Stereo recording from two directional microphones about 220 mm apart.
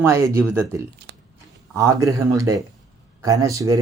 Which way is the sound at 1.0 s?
50° right (ahead or behind).